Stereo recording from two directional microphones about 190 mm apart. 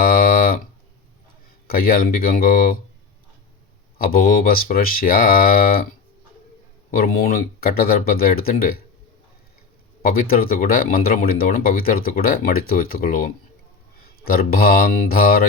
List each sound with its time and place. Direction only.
0.0 s a sound: 50° left (ahead or behind)
1.6 s speech: 50° left (ahead or behind)
3.9 s speech: 50° left (ahead or behind)
6.9 s speech: 50° left (ahead or behind)
10.0 s speech: 50° left (ahead or behind)